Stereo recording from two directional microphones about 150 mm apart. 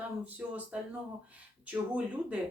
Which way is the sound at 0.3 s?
10° right (ahead or behind).